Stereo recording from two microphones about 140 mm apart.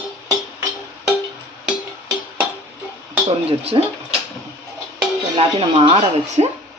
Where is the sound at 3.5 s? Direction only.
45° right (ahead or behind).